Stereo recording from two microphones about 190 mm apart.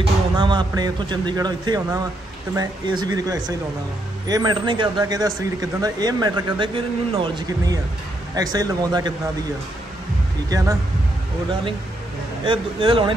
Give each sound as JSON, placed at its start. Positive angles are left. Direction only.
{"t": 0.0, "sound": "speech", "side_deg": -25}
{"t": 10.5, "sound": "speech", "side_deg": -20}
{"t": 12.4, "sound": "speech", "side_deg": -25}